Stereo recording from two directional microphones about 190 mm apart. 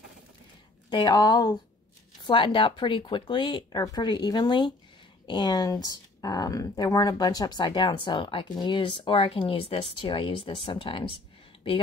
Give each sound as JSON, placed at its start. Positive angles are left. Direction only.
{"t": 0.8, "sound": "speech", "side_deg": 25}